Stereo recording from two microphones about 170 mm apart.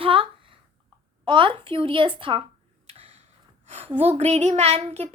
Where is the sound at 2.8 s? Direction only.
40° right (ahead or behind).